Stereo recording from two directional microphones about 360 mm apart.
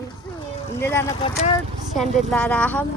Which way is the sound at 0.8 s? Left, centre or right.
Centre.